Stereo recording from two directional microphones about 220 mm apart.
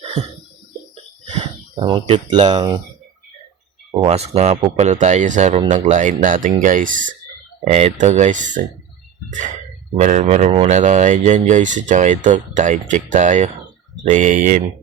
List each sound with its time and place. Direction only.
0.0 s cough: 30° right (ahead or behind)
1.3 s speech: 25° right (ahead or behind)
4.0 s speech: 30° right (ahead or behind)
10.0 s speech: 35° right (ahead or behind)